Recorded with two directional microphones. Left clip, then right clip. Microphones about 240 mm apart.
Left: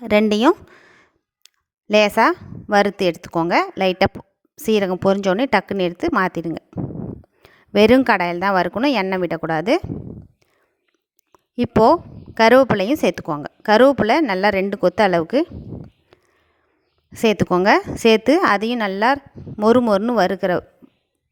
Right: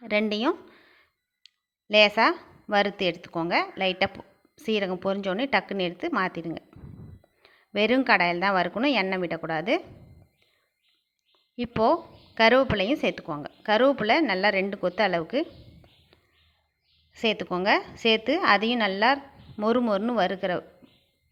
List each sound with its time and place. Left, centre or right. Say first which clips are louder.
0.0 s a woman's voice: left 10 dB; left
11.3 s a woman's voice: left 11 dB; left
17.1 s a woman's voice: left 9 dB; left